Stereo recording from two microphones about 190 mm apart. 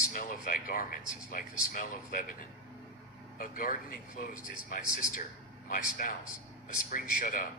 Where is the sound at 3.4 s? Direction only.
45° left (ahead or behind).